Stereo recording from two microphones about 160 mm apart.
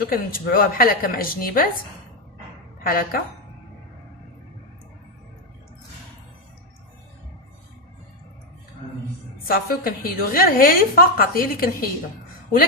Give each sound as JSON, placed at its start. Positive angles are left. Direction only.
{"t": 0.1, "sound": "a woman's voice", "side_deg": 65}
{"t": 2.8, "sound": "a woman's voice", "side_deg": 65}
{"t": 9.5, "sound": "a woman's voice", "side_deg": 65}